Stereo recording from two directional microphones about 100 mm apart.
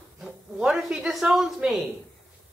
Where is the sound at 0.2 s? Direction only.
5° right (ahead or behind).